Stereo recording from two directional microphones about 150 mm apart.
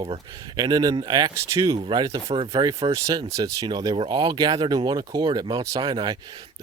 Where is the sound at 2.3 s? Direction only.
40° right (ahead or behind).